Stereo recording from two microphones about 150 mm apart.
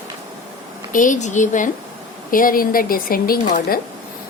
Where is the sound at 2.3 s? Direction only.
70° left (ahead or behind).